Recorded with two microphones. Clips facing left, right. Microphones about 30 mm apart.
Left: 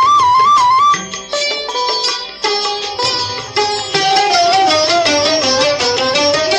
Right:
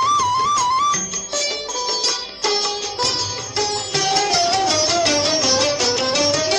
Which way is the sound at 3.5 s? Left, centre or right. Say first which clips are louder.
Left 7 dB; left.